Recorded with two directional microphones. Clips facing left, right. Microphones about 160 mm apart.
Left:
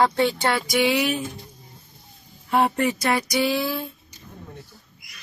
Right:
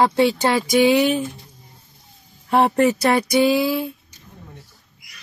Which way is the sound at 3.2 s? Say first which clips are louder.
Right 6 dB; 20° right (ahead or behind).